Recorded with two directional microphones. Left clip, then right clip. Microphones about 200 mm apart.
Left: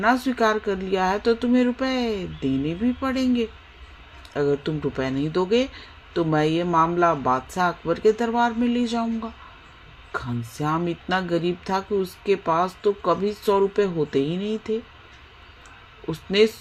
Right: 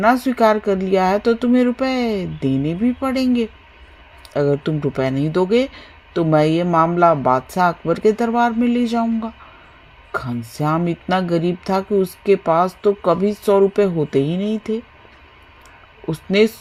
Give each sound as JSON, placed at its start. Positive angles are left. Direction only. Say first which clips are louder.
{"t": 0.0, "sound": "speech", "louder": "right 6 dB", "side_deg": -40}
{"t": 16.0, "sound": "speech", "louder": "right 3 dB", "side_deg": -40}